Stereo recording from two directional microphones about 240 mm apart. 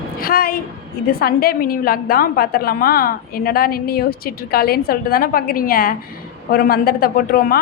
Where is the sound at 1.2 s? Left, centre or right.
Left.